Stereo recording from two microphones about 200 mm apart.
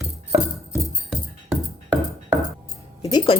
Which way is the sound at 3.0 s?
20° left (ahead or behind).